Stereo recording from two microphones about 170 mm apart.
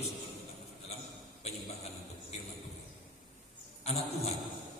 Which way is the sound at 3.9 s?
40° left (ahead or behind).